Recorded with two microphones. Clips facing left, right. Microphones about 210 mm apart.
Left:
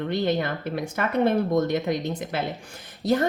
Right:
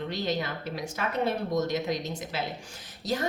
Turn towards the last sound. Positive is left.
turn(degrees=55)  # may be behind; listen again after turning